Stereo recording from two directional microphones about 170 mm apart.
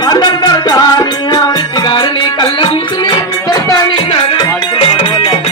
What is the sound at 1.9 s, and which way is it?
Music, 25° left (ahead or behind).